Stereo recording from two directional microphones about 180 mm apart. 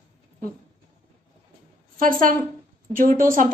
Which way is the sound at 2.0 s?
50° right (ahead or behind).